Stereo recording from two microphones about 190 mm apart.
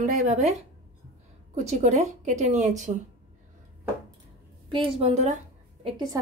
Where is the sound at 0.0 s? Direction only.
40° right (ahead or behind).